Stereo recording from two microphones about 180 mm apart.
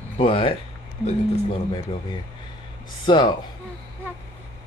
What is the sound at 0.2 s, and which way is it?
Speech, 30° left (ahead or behind).